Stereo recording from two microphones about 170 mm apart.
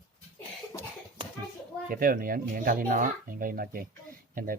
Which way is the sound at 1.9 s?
55° right (ahead or behind).